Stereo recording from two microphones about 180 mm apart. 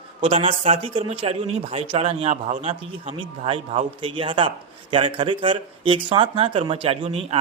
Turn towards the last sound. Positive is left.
turn(degrees=-35)  # may be behind; listen again after turning